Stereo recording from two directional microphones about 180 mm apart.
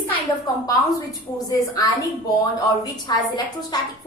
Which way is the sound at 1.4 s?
20° left (ahead or behind).